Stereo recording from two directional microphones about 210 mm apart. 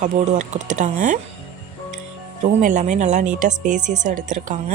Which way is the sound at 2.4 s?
35° right (ahead or behind).